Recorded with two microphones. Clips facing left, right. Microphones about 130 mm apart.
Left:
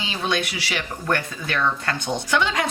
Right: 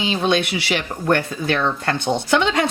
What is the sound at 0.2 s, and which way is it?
Speech, 25° right (ahead or behind).